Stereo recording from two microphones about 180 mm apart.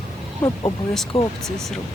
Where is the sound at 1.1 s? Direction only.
35° left (ahead or behind).